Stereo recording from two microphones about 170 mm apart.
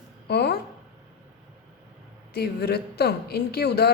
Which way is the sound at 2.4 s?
70° left (ahead or behind).